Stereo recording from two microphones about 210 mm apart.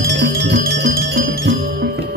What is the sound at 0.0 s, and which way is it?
Music, 50° right (ahead or behind).